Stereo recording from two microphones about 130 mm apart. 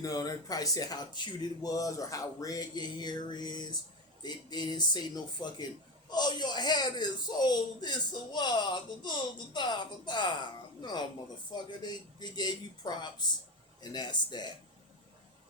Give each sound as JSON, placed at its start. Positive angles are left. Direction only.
{"t": 0.0, "sound": "a man's voice", "side_deg": 30}